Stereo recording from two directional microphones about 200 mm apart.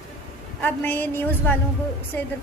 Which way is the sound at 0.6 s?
10° left (ahead or behind).